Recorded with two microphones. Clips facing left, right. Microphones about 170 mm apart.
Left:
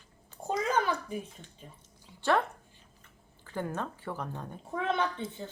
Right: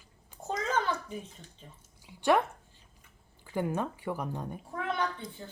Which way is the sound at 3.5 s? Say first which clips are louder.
Right 3 dB; 15° right (ahead or behind).